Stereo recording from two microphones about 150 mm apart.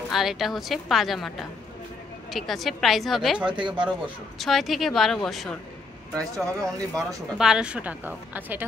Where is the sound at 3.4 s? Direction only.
30° right (ahead or behind).